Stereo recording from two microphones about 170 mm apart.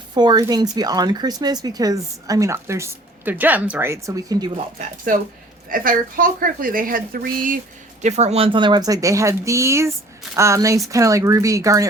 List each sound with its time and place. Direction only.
0.1 s speech: 25° right (ahead or behind)
5.6 s speech: 55° right (ahead or behind)
8.0 s speech: 40° right (ahead or behind); by 11.9 s 20° right (ahead or behind)